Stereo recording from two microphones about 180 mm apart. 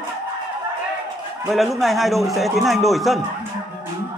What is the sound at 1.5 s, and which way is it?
Speech, centre (ahead or behind).